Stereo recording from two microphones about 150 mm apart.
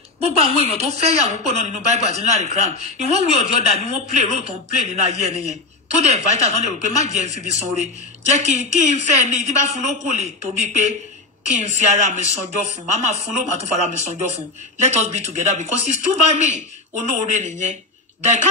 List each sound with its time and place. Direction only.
0.2 s a man's voice: 40° right (ahead or behind)